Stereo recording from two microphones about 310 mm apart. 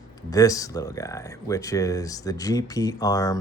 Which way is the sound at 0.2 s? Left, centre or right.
Centre.